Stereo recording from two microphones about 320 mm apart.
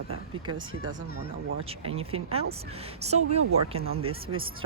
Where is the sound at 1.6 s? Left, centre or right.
Centre.